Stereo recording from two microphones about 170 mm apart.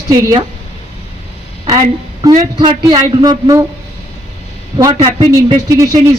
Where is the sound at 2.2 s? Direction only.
20° right (ahead or behind).